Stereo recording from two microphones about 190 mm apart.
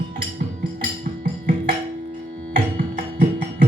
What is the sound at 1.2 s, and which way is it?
Music, 45° right (ahead or behind).